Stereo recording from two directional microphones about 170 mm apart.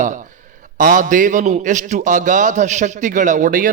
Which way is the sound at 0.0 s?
45° right (ahead or behind).